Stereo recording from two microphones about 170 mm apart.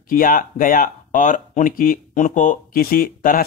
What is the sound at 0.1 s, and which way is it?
Speech, 55° left (ahead or behind).